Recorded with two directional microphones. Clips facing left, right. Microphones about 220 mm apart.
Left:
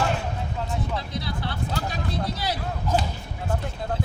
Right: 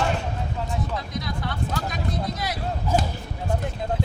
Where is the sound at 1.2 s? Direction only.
30° left (ahead or behind).